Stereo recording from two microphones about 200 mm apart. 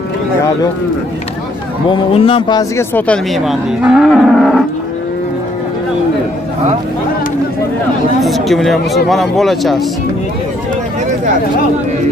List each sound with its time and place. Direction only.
1.9 s speech: 25° left (ahead or behind)
2.8 s speech: 10° left (ahead or behind)
3.3 s speech: centre (ahead or behind)
8.2 s speech: centre (ahead or behind)